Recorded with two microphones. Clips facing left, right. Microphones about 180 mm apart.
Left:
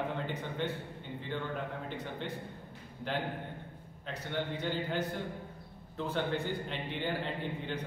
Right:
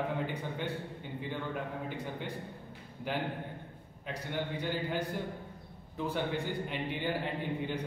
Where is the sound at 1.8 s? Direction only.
10° right (ahead or behind).